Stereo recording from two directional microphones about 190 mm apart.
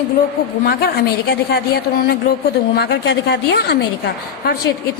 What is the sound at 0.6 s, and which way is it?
A woman's voice, 55° left (ahead or behind).